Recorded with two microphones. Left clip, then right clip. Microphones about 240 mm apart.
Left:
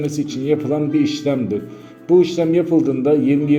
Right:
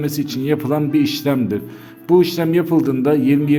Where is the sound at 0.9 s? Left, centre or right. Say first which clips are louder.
Right 1 dB; right.